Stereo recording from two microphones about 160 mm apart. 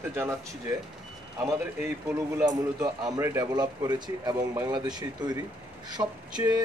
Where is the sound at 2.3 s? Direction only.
25° right (ahead or behind).